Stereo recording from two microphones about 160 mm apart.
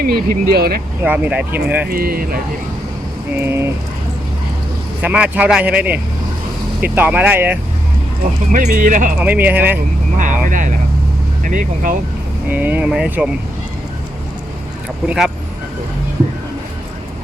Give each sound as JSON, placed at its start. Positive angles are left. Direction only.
{"t": 0.0, "sound": "speech", "side_deg": -70}
{"t": 1.0, "sound": "speech", "side_deg": -10}
{"t": 1.9, "sound": "speech", "side_deg": -65}
{"t": 3.4, "sound": "speech", "side_deg": -15}
{"t": 5.0, "sound": "speech", "side_deg": -10}
{"t": 8.5, "sound": "speech", "side_deg": -55}
{"t": 9.2, "sound": "speech", "side_deg": -10}
{"t": 10.2, "sound": "speech", "side_deg": -55}
{"t": 12.5, "sound": "speech", "side_deg": -10}
{"t": 15.0, "sound": "speech", "side_deg": -5}